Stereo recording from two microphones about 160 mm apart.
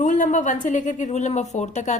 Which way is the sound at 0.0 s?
50° left (ahead or behind).